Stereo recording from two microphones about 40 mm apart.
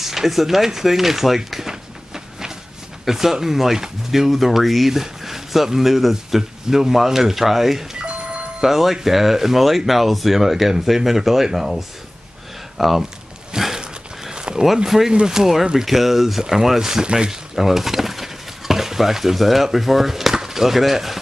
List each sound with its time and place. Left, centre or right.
0.0 s a sound: centre
3.1 s speech: centre
8.0 s doorbell: right
8.5 s speech: centre
13.7 s a sound: right
15.2 s speech: centre
17.3 s speech: centre